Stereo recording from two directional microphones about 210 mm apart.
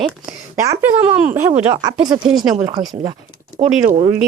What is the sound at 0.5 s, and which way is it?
Speech, 15° right (ahead or behind).